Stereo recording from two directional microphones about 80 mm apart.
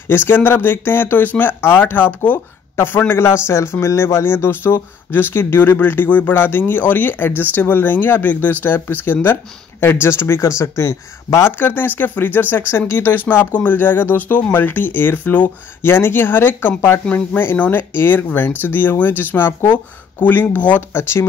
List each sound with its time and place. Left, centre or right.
0.1 s speech: left
17.0 s speech: centre; by 21.3 s left